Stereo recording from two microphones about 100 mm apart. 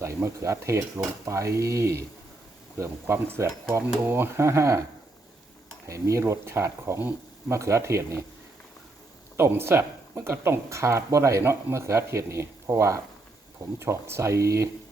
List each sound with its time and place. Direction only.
0.0 s speech: 30° right (ahead or behind)
5.8 s speech: 30° right (ahead or behind)
9.4 s speech: 25° right (ahead or behind)